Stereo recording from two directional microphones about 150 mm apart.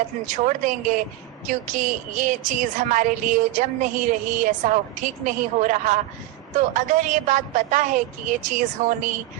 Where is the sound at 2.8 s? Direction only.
55° right (ahead or behind).